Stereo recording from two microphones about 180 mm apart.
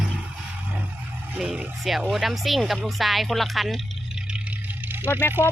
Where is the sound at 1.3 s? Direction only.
5° right (ahead or behind).